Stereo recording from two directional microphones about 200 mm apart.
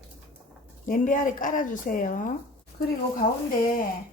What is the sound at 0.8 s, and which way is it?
A woman's voice, 45° left (ahead or behind).